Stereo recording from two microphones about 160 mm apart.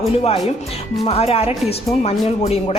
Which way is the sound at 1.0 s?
40° left (ahead or behind).